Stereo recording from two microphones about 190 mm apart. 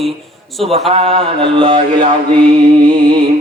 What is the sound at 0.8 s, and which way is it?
Mantra, 30° right (ahead or behind).